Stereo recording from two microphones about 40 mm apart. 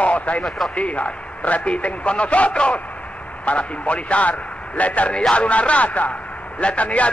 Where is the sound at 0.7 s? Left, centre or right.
Left.